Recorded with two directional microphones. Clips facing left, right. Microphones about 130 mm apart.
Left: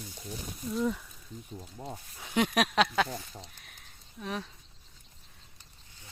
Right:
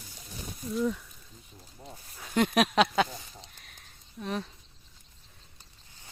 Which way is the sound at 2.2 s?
Centre (ahead or behind).